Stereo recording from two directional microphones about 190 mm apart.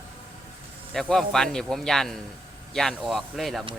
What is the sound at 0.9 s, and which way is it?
Speech, centre (ahead or behind).